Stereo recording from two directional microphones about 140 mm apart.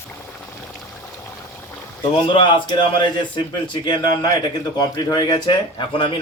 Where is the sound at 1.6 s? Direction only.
15° left (ahead or behind).